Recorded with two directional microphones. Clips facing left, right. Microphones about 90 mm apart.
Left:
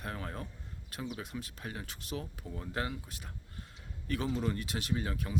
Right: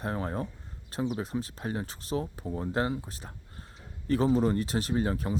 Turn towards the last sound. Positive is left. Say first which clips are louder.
# right 7 dB
turn(degrees=-35)  # may be behind; listen again after turning